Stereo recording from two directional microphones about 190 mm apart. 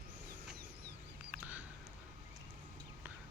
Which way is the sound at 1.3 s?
10° right (ahead or behind).